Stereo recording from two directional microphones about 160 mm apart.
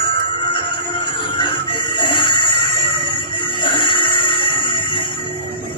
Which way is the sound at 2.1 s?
30° left (ahead or behind).